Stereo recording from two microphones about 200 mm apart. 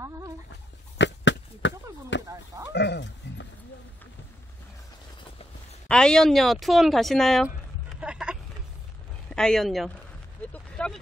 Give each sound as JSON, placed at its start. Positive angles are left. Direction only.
{"t": 0.9, "sound": "a sound", "side_deg": 65}
{"t": 5.9, "sound": "speech", "side_deg": 5}
{"t": 10.5, "sound": "vehicle", "side_deg": 5}